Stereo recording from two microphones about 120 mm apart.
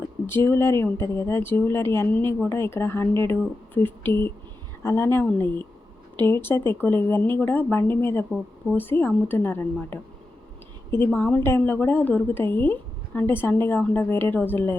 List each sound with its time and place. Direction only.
0.3 s a woman's voice: 20° left (ahead or behind)